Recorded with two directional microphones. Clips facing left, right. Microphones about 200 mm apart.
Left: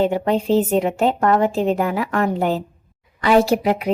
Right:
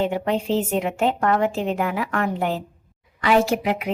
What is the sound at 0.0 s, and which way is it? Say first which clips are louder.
A woman's voice: left 4 dB; 35° left (ahead or behind).